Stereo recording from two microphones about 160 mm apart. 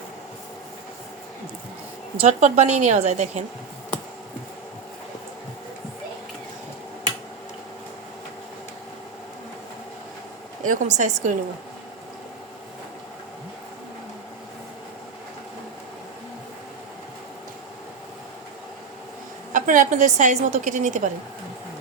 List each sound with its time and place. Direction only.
2.1 s a woman's voice: 40° right (ahead or behind)
10.7 s a woman's voice: 50° right (ahead or behind)
19.5 s a woman's voice: 55° right (ahead or behind)